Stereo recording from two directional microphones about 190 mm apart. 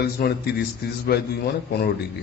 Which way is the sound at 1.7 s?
55° left (ahead or behind).